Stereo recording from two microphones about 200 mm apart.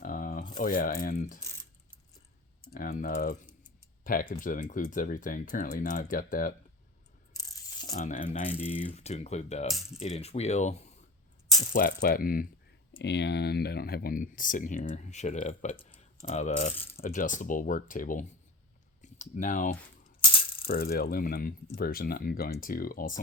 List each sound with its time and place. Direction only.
0.0 s a sound: 45° left (ahead or behind)
0.6 s speech: 45° left (ahead or behind)
2.7 s speech: 45° left (ahead or behind)
7.5 s a sound: 20° left (ahead or behind)
7.9 s speech: 40° left (ahead or behind)
9.6 s speech: centre (ahead or behind)
10.0 s speech: 30° left (ahead or behind)
11.7 s speech: 45° left (ahead or behind)
13.0 s speech: 60° left (ahead or behind); by 19.7 s 40° left (ahead or behind)
20.3 s ratchet: 25° left (ahead or behind)
20.7 s speech: 50° left (ahead or behind)